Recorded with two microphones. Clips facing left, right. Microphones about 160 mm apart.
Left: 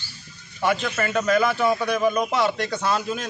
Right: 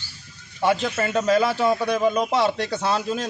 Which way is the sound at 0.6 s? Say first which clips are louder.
Right 2 dB; 30° right (ahead or behind).